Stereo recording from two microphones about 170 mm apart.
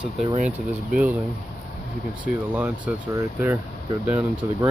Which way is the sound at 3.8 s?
25° right (ahead or behind).